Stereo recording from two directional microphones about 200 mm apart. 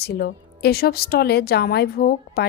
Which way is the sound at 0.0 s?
55° left (ahead or behind).